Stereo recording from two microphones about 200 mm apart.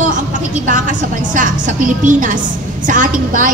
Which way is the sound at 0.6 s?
40° right (ahead or behind).